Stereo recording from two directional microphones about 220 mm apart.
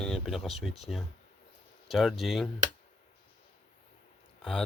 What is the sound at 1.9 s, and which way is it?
Speech, centre (ahead or behind).